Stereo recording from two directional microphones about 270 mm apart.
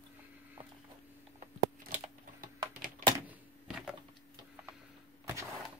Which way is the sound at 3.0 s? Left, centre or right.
Centre.